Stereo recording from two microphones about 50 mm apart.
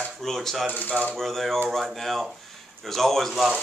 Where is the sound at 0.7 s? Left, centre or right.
Left.